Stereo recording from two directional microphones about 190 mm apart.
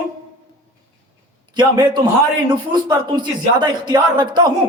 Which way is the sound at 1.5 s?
25° right (ahead or behind).